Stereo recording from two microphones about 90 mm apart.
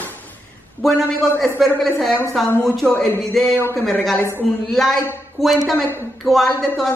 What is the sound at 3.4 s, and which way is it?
Speech, centre (ahead or behind).